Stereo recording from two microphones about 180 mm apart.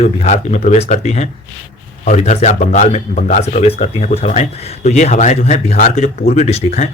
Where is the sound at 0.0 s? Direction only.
40° left (ahead or behind).